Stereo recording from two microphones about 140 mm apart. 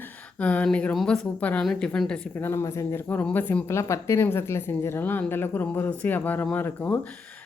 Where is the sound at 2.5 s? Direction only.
20° left (ahead or behind).